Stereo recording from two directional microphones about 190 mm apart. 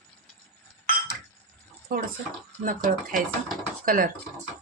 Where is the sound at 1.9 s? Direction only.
50° right (ahead or behind).